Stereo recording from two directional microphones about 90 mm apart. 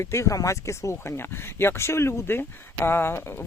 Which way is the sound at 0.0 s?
30° left (ahead or behind).